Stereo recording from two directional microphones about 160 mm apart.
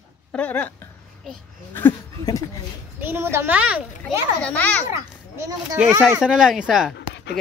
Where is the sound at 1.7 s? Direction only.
15° left (ahead or behind).